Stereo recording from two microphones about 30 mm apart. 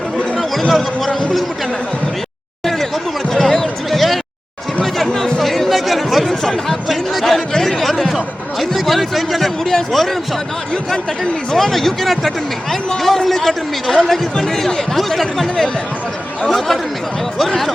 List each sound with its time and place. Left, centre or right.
0.7 s speech: centre
2.6 s a sound: centre
3.2 s basketball bounce: centre
3.8 s a sound: centre
6.4 s a man's voice: centre
8.1 s a man's voice: centre